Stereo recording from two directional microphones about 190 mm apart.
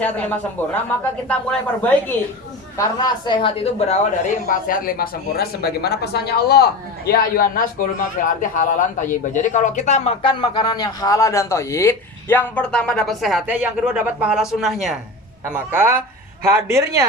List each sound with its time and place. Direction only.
0.0 s speech: 10° left (ahead or behind)
2.7 s a woman's voice: 20° left (ahead or behind)
4.4 s speech: 45° left (ahead or behind)
10.4 s speech: 20° left (ahead or behind); by 14.9 s centre (ahead or behind)
15.5 s speech: 10° right (ahead or behind)